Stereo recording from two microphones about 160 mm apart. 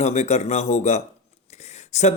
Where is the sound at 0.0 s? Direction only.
45° left (ahead or behind).